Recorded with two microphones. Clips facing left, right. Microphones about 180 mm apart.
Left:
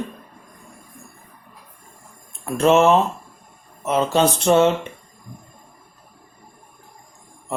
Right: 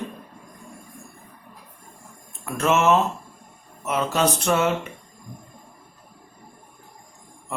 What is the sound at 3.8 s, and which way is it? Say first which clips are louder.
Speech: left 4 dB; 30° left (ahead or behind).